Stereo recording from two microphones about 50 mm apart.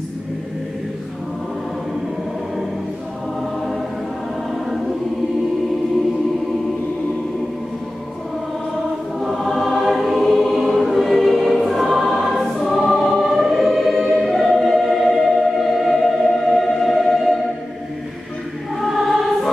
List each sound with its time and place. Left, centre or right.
4.5 s choir: centre
9.2 s choir: centre
14.1 s music: centre
18.8 s choir: centre